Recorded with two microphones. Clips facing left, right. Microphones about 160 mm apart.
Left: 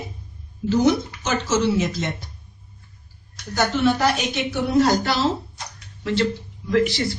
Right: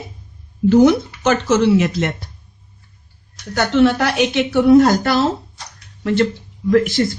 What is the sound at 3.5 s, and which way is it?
A woman's voice, 70° right (ahead or behind).